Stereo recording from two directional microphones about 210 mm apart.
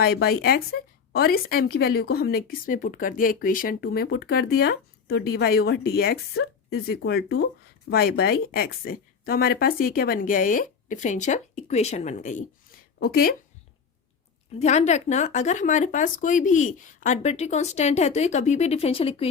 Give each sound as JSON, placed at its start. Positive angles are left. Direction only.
{"t": 0.0, "sound": "speech", "side_deg": 50}
{"t": 13.0, "sound": "speech", "side_deg": 45}
{"t": 14.6, "sound": "speech", "side_deg": 35}